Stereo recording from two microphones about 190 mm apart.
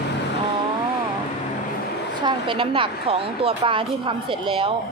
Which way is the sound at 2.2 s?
25° right (ahead or behind).